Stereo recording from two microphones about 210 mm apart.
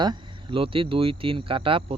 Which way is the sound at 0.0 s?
20° right (ahead or behind).